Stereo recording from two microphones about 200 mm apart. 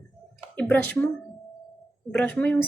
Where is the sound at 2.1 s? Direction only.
5° left (ahead or behind).